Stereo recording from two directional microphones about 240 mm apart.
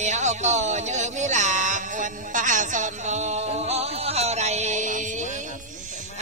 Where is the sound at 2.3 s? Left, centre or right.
Right.